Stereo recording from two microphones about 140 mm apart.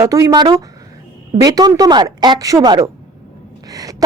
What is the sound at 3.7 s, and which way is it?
Gasp, 25° right (ahead or behind).